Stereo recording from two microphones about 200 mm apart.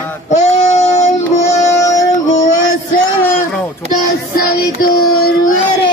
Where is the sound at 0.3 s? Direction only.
35° left (ahead or behind).